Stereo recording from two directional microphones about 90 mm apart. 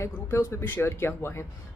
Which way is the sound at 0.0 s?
30° left (ahead or behind).